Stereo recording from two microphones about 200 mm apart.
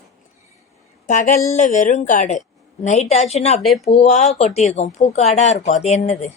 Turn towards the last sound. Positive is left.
turn(degrees=35)  # may be behind; listen again after turning